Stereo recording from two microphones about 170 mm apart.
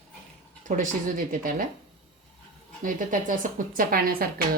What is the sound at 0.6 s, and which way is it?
Speech, 50° right (ahead or behind).